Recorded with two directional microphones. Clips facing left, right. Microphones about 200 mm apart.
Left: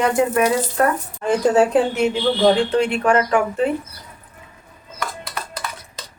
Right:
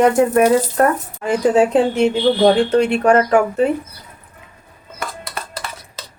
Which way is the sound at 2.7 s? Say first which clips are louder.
Right 4 dB; 40° right (ahead or behind).